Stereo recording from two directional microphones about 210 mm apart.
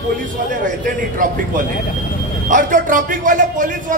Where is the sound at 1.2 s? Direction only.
40° right (ahead or behind).